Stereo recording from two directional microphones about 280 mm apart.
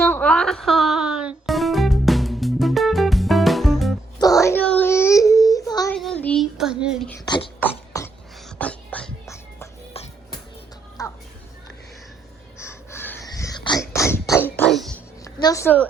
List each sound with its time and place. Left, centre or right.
0.0 s music: centre
4.2 s a sound: centre
6.0 s child singing: centre
7.3 s beatboxing: centre
7.9 s music: centre
11.0 s music: centre
12.6 s a sound: centre